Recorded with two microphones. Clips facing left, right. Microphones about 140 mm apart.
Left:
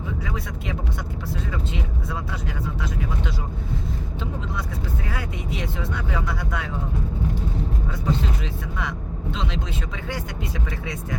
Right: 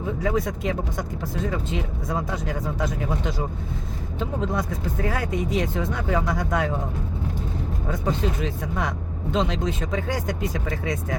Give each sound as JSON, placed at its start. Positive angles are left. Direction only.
{"t": 0.2, "sound": "speech", "side_deg": -45}
{"t": 2.0, "sound": "speech", "side_deg": -40}
{"t": 7.9, "sound": "speech", "side_deg": -45}